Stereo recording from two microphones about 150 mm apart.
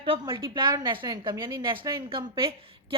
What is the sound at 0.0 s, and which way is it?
A woman's voice, 35° right (ahead or behind).